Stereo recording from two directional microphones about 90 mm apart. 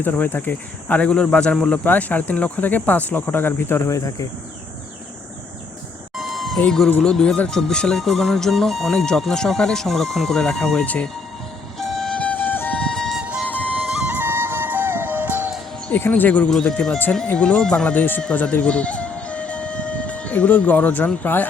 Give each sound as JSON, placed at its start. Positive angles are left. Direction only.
{"t": 0.0, "sound": "speech", "side_deg": 20}
{"t": 6.1, "sound": "a sound", "side_deg": 0}
{"t": 6.6, "sound": "speech", "side_deg": 10}
{"t": 11.8, "sound": "music", "side_deg": 5}
{"t": 12.2, "sound": "music", "side_deg": 20}
{"t": 13.4, "sound": "music", "side_deg": 15}
{"t": 13.7, "sound": "music", "side_deg": -20}
{"t": 15.9, "sound": "speech", "side_deg": 20}
{"t": 18.2, "sound": "music", "side_deg": 10}